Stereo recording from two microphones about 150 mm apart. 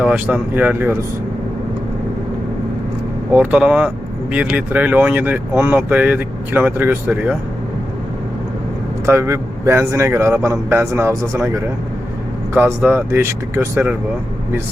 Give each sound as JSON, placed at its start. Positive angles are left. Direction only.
{"t": 0.0, "sound": "speech", "side_deg": -10}
{"t": 3.3, "sound": "speech", "side_deg": -10}
{"t": 9.0, "sound": "speech", "side_deg": -20}
{"t": 12.5, "sound": "speech", "side_deg": -15}